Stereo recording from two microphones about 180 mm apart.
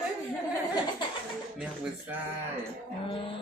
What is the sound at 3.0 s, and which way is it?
Speech, 30° left (ahead or behind).